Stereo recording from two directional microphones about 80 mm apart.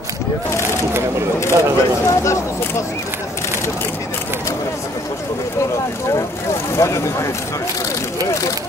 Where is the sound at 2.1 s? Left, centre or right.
Left.